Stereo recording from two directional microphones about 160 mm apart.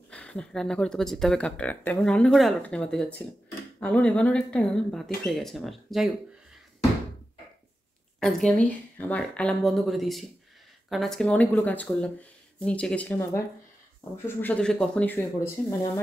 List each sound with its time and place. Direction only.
0.1 s speech: 5° left (ahead or behind)
8.2 s speech: 5° left (ahead or behind)
15.1 s speech: 20° left (ahead or behind)